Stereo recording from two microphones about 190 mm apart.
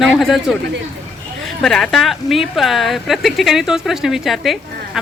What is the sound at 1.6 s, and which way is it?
Speech, 5° left (ahead or behind).